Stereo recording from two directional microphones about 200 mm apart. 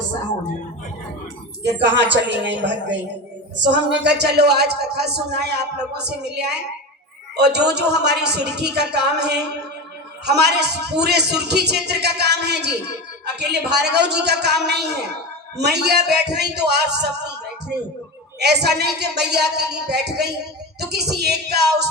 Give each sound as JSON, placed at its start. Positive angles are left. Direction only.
{"t": 1.6, "sound": "speech", "side_deg": -60}
{"t": 18.3, "sound": "speech", "side_deg": -55}